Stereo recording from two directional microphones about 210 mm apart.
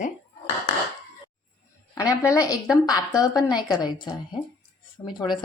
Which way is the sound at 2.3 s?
15° left (ahead or behind).